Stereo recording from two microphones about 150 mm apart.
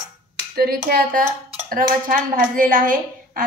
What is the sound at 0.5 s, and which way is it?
A woman's voice, 90° right.